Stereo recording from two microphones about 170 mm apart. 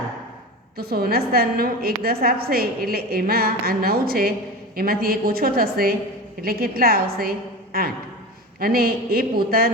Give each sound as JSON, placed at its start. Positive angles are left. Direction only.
{"t": 0.8, "sound": "a woman's voice", "side_deg": -65}